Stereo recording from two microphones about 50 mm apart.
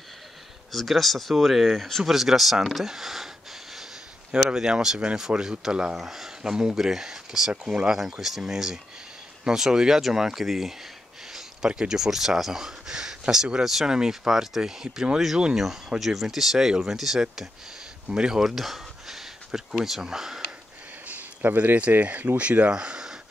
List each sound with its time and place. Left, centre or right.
0.7 s speech: centre
4.5 s speech: centre
5.9 s speech: centre
11.3 s a sound: centre
11.8 s speech: centre
18.4 s speech: centre
21.1 s a sound: right
22.0 s speech: right